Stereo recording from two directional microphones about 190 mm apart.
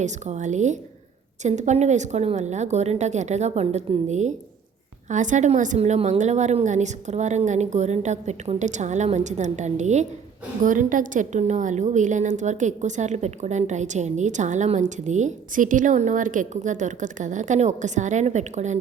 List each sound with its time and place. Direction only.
0.0 s a woman's voice: 40° right (ahead or behind)